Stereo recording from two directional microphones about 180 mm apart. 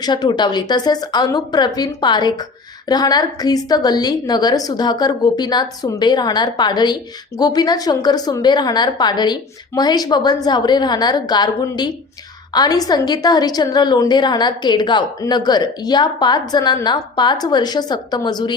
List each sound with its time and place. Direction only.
0.0 s a woman's voice: 25° left (ahead or behind)